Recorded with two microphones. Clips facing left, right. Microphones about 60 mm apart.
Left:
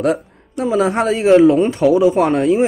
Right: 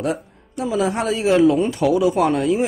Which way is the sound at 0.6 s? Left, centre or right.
Left.